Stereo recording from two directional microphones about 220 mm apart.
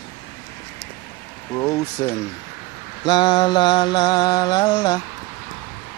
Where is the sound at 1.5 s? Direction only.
15° left (ahead or behind).